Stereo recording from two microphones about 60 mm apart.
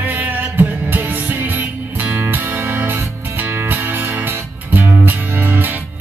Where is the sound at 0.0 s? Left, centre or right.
Right.